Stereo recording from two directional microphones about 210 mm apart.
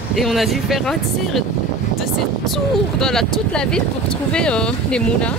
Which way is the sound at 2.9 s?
Centre (ahead or behind).